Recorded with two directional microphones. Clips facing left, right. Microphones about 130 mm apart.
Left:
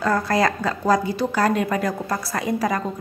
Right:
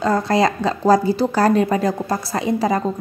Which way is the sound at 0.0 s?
25° right (ahead or behind).